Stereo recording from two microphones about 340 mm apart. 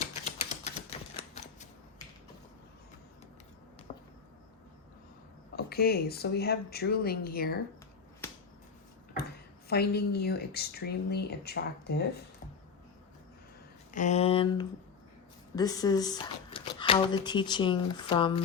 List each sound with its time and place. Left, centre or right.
0.6 s typewriter: centre
3.9 s a sound: centre
5.5 s speech: left
9.6 s speech: left
13.9 s speech: left